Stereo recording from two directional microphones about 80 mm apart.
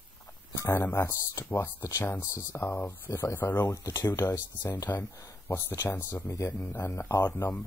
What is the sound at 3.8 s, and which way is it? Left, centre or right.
Speech, left.